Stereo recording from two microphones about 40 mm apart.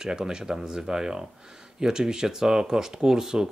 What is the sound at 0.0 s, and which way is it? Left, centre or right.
Speech, centre.